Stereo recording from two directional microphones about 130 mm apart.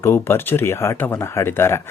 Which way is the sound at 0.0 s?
20° left (ahead or behind).